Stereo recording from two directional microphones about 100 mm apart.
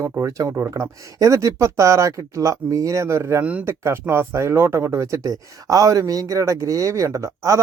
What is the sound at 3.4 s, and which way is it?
Speech, 10° right (ahead or behind).